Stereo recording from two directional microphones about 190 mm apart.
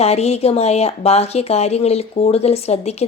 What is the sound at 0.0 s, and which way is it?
Speech, 35° left (ahead or behind).